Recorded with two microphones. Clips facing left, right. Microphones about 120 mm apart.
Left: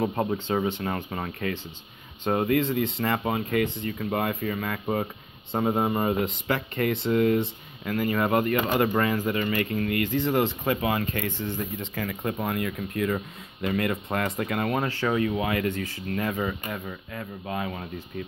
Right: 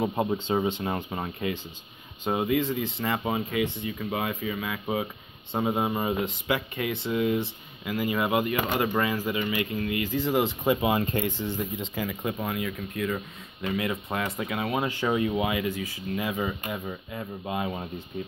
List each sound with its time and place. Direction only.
0.0 s speech: 10° right (ahead or behind); by 11.3 s 25° right (ahead or behind)
11.9 s speech: 15° right (ahead or behind)
12.2 s speech: centre (ahead or behind); by 18.0 s 20° right (ahead or behind)